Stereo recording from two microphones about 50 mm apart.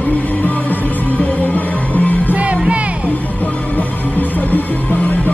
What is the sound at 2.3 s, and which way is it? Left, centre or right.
Music, right.